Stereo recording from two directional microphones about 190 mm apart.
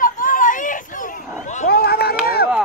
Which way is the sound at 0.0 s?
45° left (ahead or behind).